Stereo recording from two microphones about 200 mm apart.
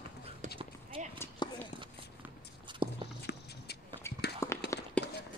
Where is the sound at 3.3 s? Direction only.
60° left (ahead or behind).